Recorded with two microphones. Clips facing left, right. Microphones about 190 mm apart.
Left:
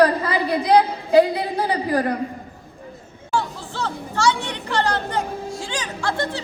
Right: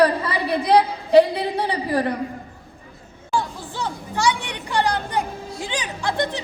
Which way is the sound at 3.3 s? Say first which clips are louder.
Even; 15° right (ahead or behind).